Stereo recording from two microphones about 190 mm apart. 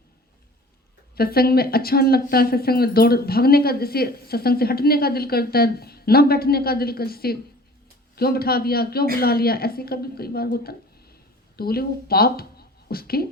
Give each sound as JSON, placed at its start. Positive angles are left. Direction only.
{"t": 1.1, "sound": "a man's voice", "side_deg": 55}